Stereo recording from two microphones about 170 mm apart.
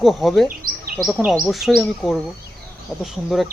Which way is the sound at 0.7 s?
55° right (ahead or behind).